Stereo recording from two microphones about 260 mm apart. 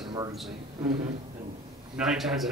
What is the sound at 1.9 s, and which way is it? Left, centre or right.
Speech, centre.